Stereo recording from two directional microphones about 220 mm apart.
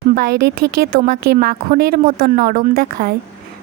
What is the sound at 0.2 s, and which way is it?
A woman's voice, 45° right (ahead or behind).